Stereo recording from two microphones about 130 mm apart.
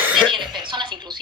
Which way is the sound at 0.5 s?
35° right (ahead or behind).